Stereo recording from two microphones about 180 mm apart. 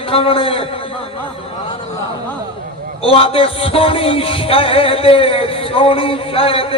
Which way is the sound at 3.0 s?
30° left (ahead or behind).